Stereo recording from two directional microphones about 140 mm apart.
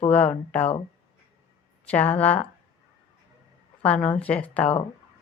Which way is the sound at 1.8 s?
10° left (ahead or behind).